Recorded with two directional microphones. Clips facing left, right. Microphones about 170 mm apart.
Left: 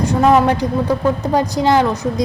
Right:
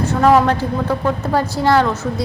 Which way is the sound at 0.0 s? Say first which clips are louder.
Even; 15° left (ahead or behind).